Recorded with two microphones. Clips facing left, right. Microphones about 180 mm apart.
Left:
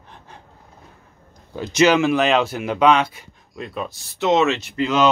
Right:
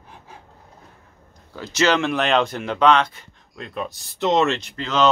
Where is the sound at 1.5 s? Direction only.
20° left (ahead or behind).